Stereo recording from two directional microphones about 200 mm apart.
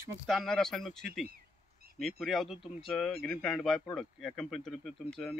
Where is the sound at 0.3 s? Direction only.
Centre (ahead or behind).